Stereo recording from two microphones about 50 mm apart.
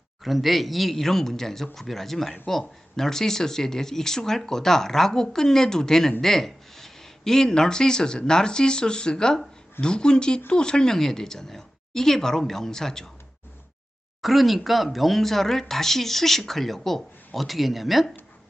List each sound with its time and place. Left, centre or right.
0.3 s speech: centre
14.2 s speech: centre